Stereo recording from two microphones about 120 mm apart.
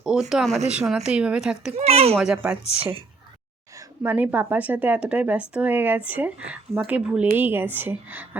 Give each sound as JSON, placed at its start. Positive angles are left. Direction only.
{"t": 0.0, "sound": "a woman's voice", "side_deg": -5}
{"t": 1.8, "sound": "a child's voice", "side_deg": -60}
{"t": 2.1, "sound": "a woman's voice", "side_deg": -5}
{"t": 3.8, "sound": "a woman's voice", "side_deg": -20}